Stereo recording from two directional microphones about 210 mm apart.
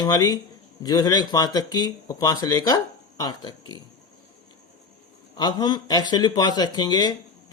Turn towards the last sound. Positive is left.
turn(degrees=20)  # may be behind; listen again after turning